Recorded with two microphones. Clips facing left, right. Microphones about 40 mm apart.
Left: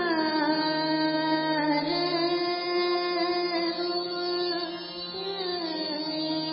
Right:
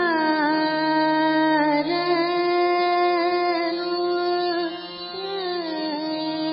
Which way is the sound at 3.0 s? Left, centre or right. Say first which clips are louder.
Right 7 dB; centre.